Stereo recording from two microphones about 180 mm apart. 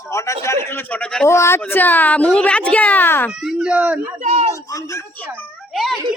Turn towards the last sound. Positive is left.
turn(degrees=0)  # may be behind; listen again after turning